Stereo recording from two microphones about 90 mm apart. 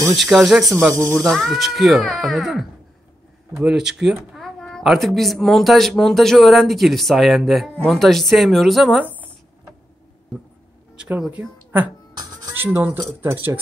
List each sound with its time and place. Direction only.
0.1 s speech: centre (ahead or behind)
4.4 s speech: 5° left (ahead or behind)
11.0 s speech: 10° right (ahead or behind)